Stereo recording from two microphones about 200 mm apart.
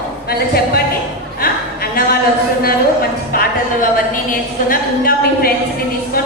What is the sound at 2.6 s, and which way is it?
Speech, 50° left (ahead or behind).